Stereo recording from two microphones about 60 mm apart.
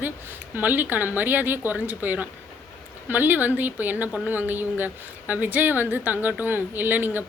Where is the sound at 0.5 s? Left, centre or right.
Right.